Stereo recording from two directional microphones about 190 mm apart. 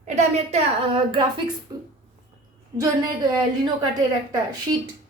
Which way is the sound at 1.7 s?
20° right (ahead or behind).